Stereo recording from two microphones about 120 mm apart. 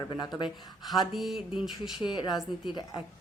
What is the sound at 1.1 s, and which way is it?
Speech, centre (ahead or behind).